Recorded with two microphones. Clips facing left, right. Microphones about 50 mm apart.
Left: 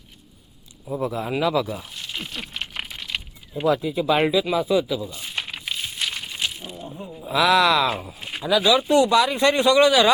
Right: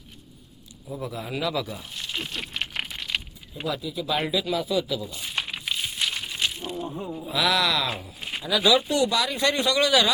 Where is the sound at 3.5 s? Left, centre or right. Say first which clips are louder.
Left 9 dB; left.